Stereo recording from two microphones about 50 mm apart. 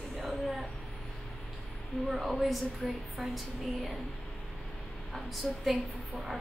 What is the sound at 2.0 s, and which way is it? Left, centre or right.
A woman's voice, centre.